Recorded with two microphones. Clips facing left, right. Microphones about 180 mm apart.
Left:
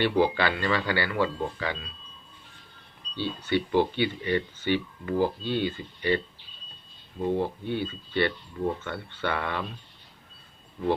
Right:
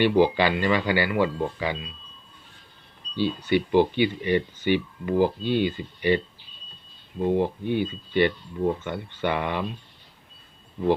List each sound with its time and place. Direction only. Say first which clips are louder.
0.0 s speech: right 4 dB; 15° right (ahead or behind)
3.2 s speech: right 4 dB; 15° right (ahead or behind)